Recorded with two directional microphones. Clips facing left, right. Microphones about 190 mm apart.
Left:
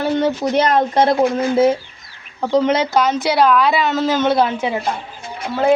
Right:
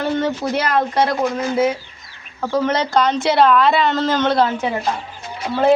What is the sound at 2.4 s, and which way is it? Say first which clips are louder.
A woman's voice: left 3 dB; 15° left (ahead or behind).